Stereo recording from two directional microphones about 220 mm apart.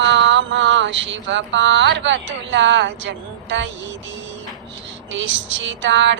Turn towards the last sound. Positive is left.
turn(degrees=-55)  # may be behind; listen again after turning